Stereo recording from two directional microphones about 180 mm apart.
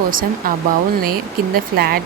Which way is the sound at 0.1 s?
50° right (ahead or behind).